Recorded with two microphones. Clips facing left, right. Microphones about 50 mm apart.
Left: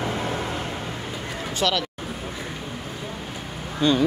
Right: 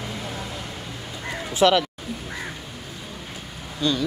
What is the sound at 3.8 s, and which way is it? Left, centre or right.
Speech, left.